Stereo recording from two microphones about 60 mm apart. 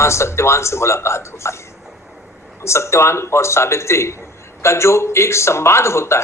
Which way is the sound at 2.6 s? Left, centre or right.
Left.